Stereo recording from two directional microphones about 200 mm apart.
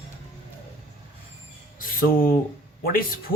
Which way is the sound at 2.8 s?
45° left (ahead or behind).